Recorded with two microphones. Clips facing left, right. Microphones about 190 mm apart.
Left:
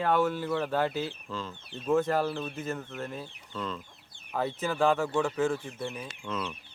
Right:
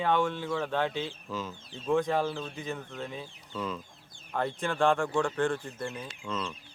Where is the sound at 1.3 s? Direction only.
10° right (ahead or behind).